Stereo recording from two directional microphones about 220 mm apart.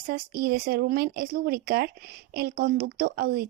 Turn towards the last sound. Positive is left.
turn(degrees=-45)  # may be behind; listen again after turning